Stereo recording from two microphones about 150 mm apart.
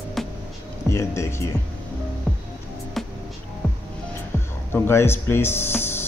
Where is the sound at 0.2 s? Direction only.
Centre (ahead or behind).